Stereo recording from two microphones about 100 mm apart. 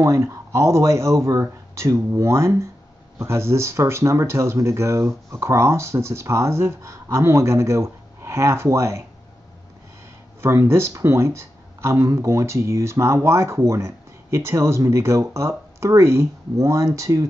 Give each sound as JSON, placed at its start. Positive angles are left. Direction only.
{"t": 0.0, "sound": "speech", "side_deg": -30}
{"t": 10.4, "sound": "speech", "side_deg": -25}